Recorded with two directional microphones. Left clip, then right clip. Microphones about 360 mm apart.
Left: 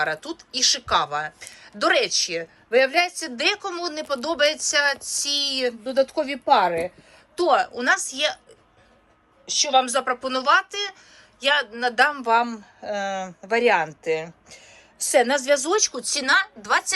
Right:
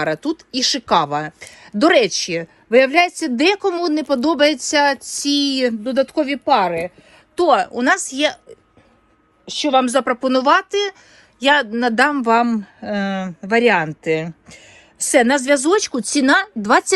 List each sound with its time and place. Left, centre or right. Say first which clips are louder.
0.0 s a woman's voice: right 5 dB; centre
9.5 s a woman's voice: right 4 dB; centre